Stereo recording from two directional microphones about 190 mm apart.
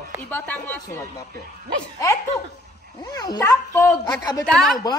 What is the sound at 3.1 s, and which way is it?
A woman's voice, 20° left (ahead or behind).